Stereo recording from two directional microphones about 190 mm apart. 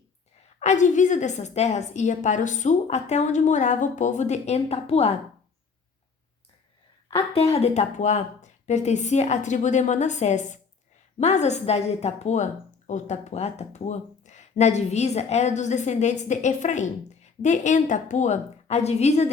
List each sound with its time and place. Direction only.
0.6 s speech: 40° left (ahead or behind)
7.3 s speech: 35° left (ahead or behind)